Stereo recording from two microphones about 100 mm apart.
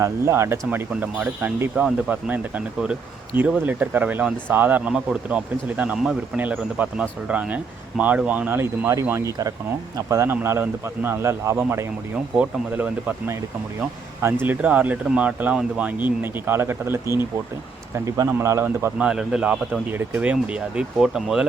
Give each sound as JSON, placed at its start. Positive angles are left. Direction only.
{"t": 0.0, "sound": "a man's voice", "side_deg": -25}
{"t": 1.7, "sound": "a man's voice", "side_deg": -10}
{"t": 12.1, "sound": "speech", "side_deg": -10}
{"t": 14.4, "sound": "a man's voice", "side_deg": -15}
{"t": 18.9, "sound": "speech", "side_deg": -10}